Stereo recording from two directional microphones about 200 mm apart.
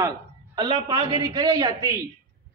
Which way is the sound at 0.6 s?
20° right (ahead or behind).